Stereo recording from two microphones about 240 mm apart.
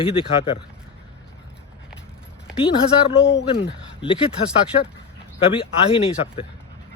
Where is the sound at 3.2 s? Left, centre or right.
Left.